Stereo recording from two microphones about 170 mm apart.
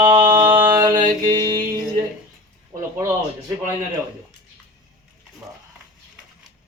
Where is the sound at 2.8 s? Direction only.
15° right (ahead or behind).